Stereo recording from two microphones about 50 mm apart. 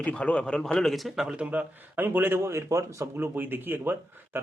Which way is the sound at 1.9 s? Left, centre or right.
Right.